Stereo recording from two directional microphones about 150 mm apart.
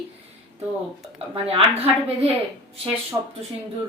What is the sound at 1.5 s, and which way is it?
Speech, 40° right (ahead or behind).